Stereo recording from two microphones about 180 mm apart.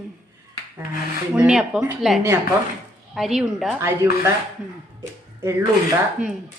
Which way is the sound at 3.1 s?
Centre (ahead or behind).